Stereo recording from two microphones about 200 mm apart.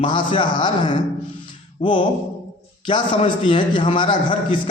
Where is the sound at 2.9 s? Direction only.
25° left (ahead or behind).